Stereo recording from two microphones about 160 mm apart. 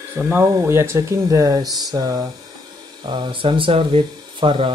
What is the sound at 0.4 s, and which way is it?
Speech, 15° right (ahead or behind).